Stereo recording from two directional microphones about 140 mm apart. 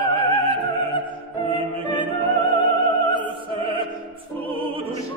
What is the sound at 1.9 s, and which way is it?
Opera, 35° left (ahead or behind).